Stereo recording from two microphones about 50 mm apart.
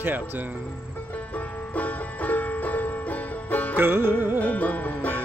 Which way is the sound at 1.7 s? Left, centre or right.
Left.